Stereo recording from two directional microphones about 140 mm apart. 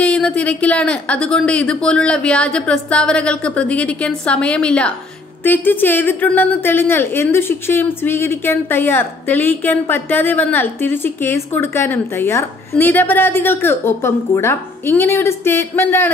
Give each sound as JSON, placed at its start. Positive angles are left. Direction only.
{"t": 0.0, "sound": "a woman's voice", "side_deg": 10}